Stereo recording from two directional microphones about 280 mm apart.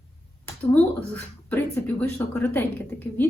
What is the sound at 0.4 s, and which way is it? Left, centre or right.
Speech, centre.